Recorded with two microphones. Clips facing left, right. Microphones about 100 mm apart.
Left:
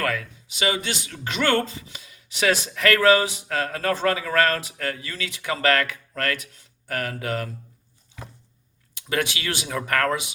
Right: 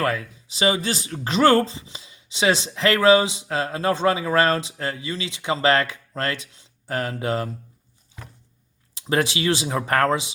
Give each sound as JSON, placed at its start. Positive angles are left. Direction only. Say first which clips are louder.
{"t": 0.0, "sound": "speech", "louder": "right 3 dB", "side_deg": -25}
{"t": 9.0, "sound": "speech", "louder": "right 4 dB", "side_deg": -30}